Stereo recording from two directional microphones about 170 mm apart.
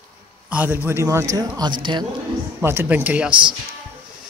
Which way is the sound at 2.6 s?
10° right (ahead or behind).